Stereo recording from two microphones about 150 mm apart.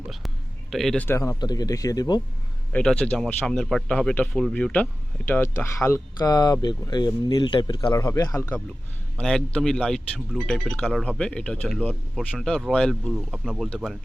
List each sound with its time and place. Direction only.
0.7 s speech: centre (ahead or behind)
1.0 s speech: 15° left (ahead or behind)
2.7 s speech: 5° left (ahead or behind)
9.1 s speech: 5° left (ahead or behind)